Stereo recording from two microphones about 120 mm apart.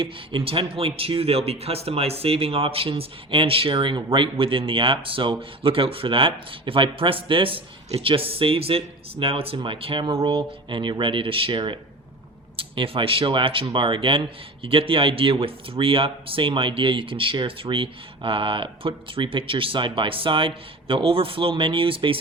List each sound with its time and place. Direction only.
0.0 s speech: 45° right (ahead or behind)